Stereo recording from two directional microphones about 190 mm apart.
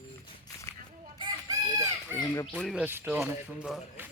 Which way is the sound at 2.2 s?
20° left (ahead or behind).